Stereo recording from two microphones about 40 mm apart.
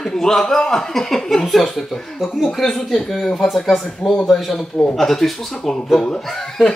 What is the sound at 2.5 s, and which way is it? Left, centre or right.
Speech, centre.